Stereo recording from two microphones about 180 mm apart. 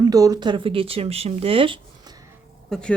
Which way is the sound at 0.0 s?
20° right (ahead or behind).